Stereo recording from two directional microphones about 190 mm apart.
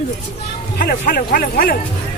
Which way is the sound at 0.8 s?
50° left (ahead or behind).